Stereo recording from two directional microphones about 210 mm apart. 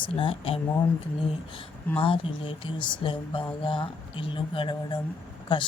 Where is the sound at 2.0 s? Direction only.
25° left (ahead or behind).